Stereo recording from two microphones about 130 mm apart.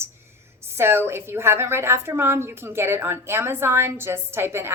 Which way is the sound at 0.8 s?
20° right (ahead or behind).